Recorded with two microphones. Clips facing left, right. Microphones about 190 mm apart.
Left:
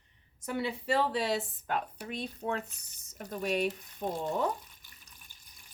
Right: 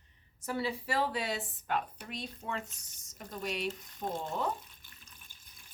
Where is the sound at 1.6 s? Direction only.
50° left (ahead or behind).